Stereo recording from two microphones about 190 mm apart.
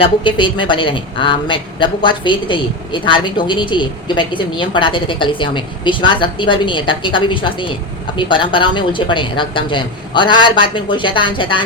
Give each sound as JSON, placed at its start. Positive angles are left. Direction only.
{"t": 0.0, "sound": "a woman's voice", "side_deg": 25}